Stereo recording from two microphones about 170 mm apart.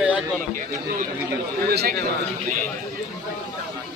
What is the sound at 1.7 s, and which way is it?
Speech, 70° right (ahead or behind).